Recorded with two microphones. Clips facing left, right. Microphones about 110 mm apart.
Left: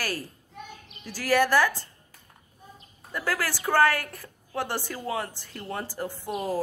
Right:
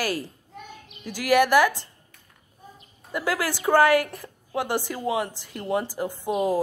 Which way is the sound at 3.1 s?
15° right (ahead or behind).